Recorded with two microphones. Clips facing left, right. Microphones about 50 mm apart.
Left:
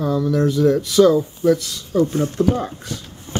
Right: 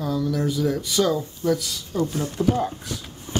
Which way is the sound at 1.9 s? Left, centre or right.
Left.